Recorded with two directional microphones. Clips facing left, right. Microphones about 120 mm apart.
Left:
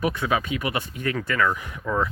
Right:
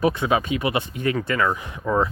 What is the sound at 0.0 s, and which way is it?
Speech, 25° right (ahead or behind).